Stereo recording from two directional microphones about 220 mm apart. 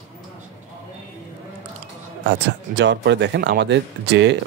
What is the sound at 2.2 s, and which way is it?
Speech, 50° right (ahead or behind).